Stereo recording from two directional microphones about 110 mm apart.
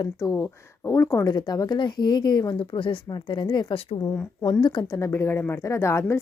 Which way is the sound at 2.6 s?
50° left (ahead or behind).